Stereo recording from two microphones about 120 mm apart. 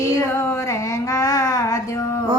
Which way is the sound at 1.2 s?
25° left (ahead or behind).